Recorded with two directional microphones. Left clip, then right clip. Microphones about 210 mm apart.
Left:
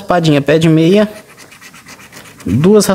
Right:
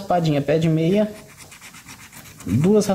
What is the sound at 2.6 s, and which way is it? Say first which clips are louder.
Speech: left 9 dB; 30° left (ahead or behind).